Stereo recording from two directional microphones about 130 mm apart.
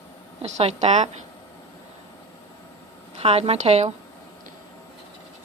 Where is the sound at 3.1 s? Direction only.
50° right (ahead or behind).